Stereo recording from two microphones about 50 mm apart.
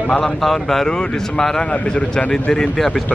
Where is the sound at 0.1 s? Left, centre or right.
Centre.